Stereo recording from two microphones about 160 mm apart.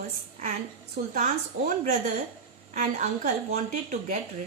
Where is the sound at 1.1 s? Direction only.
50° right (ahead or behind).